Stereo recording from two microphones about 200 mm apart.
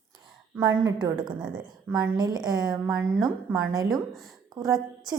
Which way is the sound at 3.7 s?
20° right (ahead or behind).